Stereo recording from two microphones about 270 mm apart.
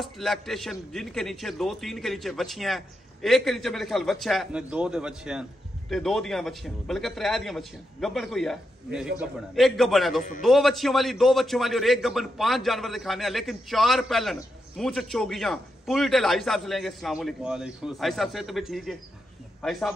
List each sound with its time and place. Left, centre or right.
0.0 s a man's voice: centre